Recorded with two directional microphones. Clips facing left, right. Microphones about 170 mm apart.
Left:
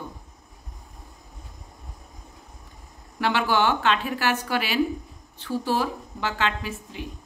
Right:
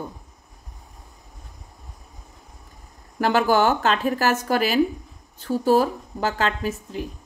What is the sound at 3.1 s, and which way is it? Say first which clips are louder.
Speech: right 4 dB; 40° right (ahead or behind).